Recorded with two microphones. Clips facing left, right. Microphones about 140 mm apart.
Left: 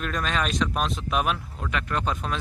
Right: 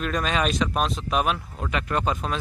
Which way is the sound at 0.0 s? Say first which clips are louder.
Right 3 dB; 5° right (ahead or behind).